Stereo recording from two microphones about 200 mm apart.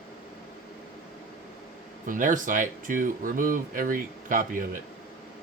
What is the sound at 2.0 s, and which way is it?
Speech, 40° right (ahead or behind).